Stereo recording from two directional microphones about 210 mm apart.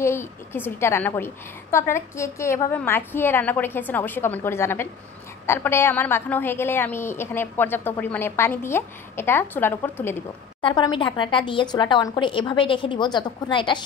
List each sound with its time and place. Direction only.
0.0 s a woman's voice: 10° left (ahead or behind)
10.6 s a woman's voice: 20° left (ahead or behind)